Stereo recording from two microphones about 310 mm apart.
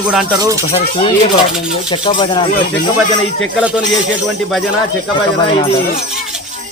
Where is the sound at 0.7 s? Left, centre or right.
Centre.